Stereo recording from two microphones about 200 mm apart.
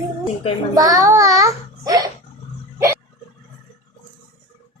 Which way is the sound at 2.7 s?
15° right (ahead or behind).